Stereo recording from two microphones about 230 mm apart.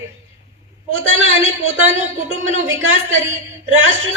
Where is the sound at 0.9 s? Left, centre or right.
Right.